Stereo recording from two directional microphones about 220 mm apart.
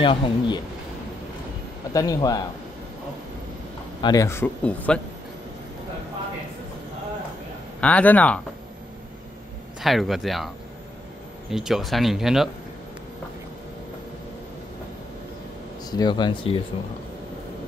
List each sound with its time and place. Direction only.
0.0 s speech: 25° left (ahead or behind)
2.0 s speech: 15° left (ahead or behind)
4.0 s speech: 15° left (ahead or behind)
7.8 s speech: 5° left (ahead or behind)
9.8 s speech: centre (ahead or behind)
11.5 s speech: centre (ahead or behind)
15.9 s speech: 20° left (ahead or behind)